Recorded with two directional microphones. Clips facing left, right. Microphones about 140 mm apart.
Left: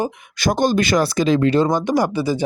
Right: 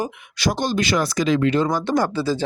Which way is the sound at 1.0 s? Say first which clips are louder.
Left 3 dB; 30° left (ahead or behind).